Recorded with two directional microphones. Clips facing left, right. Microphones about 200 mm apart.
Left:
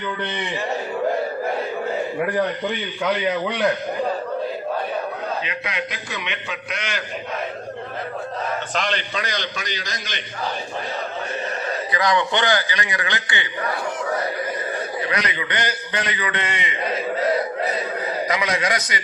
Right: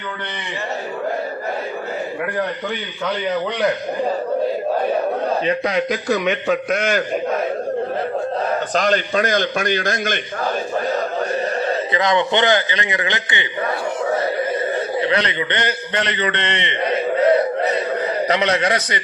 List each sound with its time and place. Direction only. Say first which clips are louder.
5.5 s a man's voice: right 10 dB; 40° right (ahead or behind)
8.7 s a man's voice: right 8 dB; 40° right (ahead or behind)
11.9 s a man's voice: right 1 dB; 25° right (ahead or behind)
18.3 s a man's voice: right 5 dB; 30° right (ahead or behind)